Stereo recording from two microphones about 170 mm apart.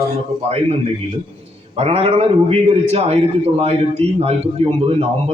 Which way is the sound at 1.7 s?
35° right (ahead or behind).